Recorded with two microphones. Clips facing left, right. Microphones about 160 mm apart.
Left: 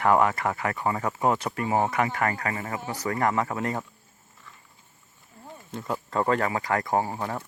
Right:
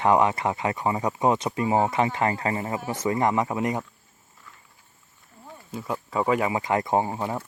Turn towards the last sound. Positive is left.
turn(degrees=-15)  # may be behind; listen again after turning